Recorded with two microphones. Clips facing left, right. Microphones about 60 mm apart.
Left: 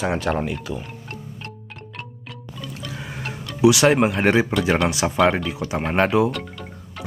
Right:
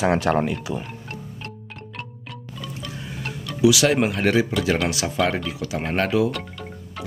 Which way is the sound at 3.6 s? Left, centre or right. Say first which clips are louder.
Left 2 dB; left.